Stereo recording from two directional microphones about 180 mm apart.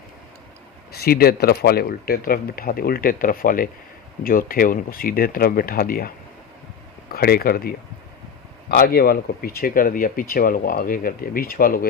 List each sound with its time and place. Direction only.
0.9 s speech: 55° left (ahead or behind)
7.1 s speech: 55° left (ahead or behind)
8.7 s speech: 55° left (ahead or behind)